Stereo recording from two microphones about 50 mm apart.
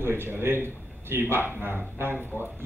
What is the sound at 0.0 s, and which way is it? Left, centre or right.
A man's voice, right.